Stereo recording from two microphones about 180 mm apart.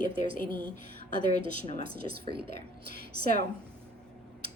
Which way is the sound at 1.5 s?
40° left (ahead or behind).